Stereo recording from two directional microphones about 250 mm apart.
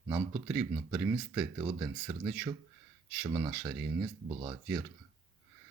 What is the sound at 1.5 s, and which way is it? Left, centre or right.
Speech, right.